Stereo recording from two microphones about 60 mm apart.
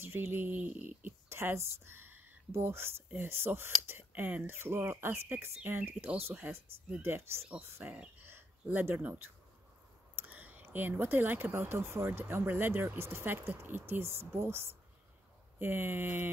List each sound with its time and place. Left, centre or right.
0.0 s speech: right
4.1 s speech: right
4.6 s speech: right
7.0 s speech: right
7.8 s speech: right
8.3 s a sound: right
10.1 s speech: right